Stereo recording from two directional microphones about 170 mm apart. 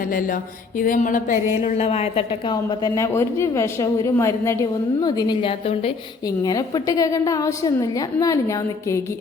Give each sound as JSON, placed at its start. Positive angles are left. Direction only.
{"t": 0.1, "sound": "a sound", "side_deg": 55}
{"t": 1.6, "sound": "a woman's voice", "side_deg": 40}
{"t": 2.5, "sound": "a woman's voice", "side_deg": 25}
{"t": 6.2, "sound": "a woman's voice", "side_deg": 20}